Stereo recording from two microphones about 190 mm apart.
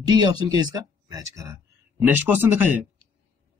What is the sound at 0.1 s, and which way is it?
Speech, 20° right (ahead or behind).